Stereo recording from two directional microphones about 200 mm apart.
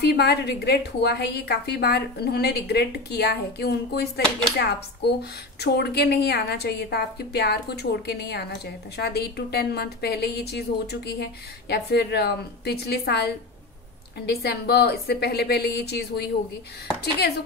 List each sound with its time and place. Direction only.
0.0 s a woman's voice: 55° left (ahead or behind)